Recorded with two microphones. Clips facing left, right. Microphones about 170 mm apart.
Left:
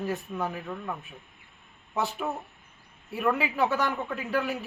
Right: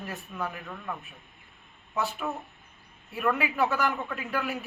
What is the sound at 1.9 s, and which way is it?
Speech, 30° left (ahead or behind).